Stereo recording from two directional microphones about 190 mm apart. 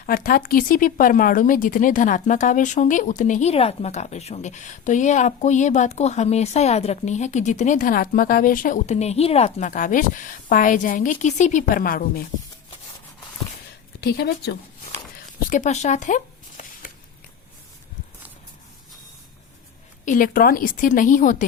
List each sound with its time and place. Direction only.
0.0 s speech: 45° left (ahead or behind)
14.0 s a woman's voice: 60° left (ahead or behind)
15.4 s a sound: 40° left (ahead or behind)
20.1 s a woman's voice: 45° left (ahead or behind)